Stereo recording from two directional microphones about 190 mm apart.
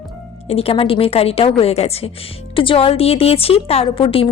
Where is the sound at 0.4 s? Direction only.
30° left (ahead or behind).